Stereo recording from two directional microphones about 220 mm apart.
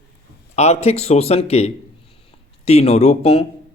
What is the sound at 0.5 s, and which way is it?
A man's voice, 30° left (ahead or behind).